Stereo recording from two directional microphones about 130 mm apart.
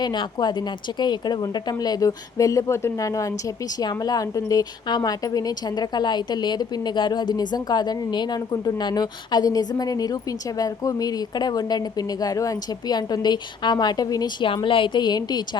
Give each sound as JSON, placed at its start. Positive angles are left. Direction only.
{"t": 0.0, "sound": "speech", "side_deg": 35}
{"t": 14.5, "sound": "speech", "side_deg": 40}